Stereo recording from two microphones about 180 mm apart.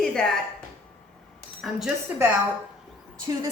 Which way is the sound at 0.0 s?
5° left (ahead or behind).